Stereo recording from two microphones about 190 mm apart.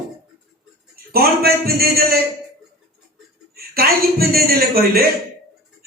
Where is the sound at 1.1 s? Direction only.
55° right (ahead or behind).